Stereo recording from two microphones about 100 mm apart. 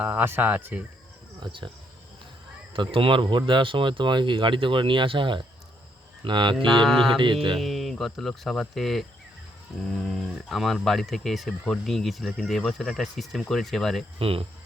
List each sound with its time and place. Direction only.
0.0 s speech: 15° right (ahead or behind)
1.4 s speech: 50° right (ahead or behind)
2.7 s speech: 60° right (ahead or behind)
6.8 s speech: centre (ahead or behind)
14.2 s speech: 70° right (ahead or behind)